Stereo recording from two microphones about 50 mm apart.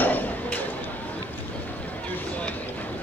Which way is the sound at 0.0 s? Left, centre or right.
Left.